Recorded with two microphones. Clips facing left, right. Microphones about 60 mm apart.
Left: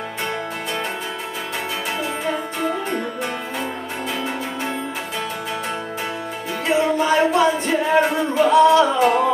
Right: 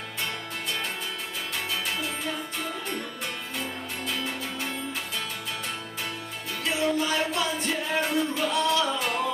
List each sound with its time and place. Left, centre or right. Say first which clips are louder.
2.2 s music: left 9 dB; left
6.6 s music: left 8 dB; left